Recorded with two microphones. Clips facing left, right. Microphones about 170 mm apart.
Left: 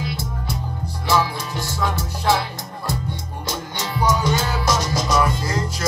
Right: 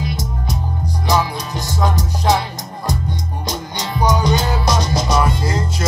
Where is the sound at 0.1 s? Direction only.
15° right (ahead or behind).